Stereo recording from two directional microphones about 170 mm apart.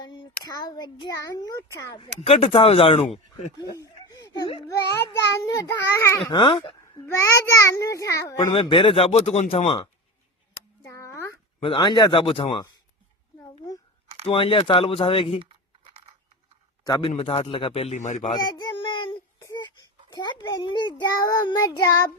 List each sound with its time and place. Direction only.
0.0 s a child's voice: 25° left (ahead or behind)
2.0 s speech: 35° left (ahead or behind)
3.6 s snicker: 20° left (ahead or behind)
4.4 s speech: 30° left (ahead or behind)
4.9 s a child's voice: 20° left (ahead or behind)
6.3 s a child's voice: 30° left (ahead or behind)
10.8 s a sound: 20° left (ahead or behind)
11.6 s a child's voice: 30° left (ahead or behind)
14.3 s speech: 30° left (ahead or behind)
15.4 s typing: 35° right (ahead or behind)
16.8 s a man's voice: 25° left (ahead or behind)
17.1 s speech: 35° left (ahead or behind)
18.3 s child singing: 25° left (ahead or behind)
21.2 s a child's voice: 25° left (ahead or behind)